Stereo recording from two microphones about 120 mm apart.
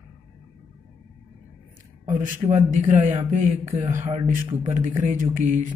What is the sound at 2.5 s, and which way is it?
Speech, 90° right.